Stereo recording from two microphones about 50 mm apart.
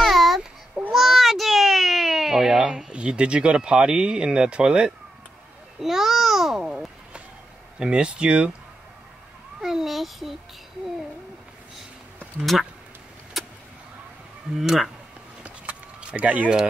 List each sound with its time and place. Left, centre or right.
0.0 s a sound: centre
2.6 s speech: centre
5.8 s a child's voice: centre
7.8 s speech: right
9.6 s a child's voice: centre
12.5 s speech: centre
13.4 s vehicle: centre
14.6 s a child's voice: centre
15.4 s a sound: right